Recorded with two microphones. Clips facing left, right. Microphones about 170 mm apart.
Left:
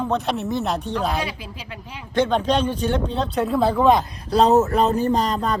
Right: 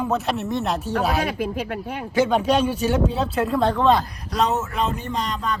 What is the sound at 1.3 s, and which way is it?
Speech, 55° right (ahead or behind).